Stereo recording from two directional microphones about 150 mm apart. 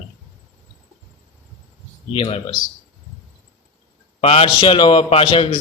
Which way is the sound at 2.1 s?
40° left (ahead or behind).